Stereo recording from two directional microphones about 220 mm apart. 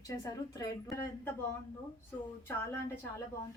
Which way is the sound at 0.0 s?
15° left (ahead or behind).